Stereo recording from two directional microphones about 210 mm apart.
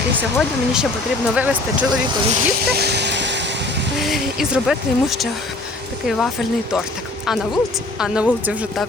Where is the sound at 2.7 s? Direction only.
50° right (ahead or behind).